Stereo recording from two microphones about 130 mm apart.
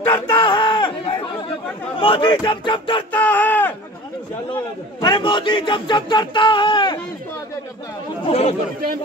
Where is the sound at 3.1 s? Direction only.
15° left (ahead or behind).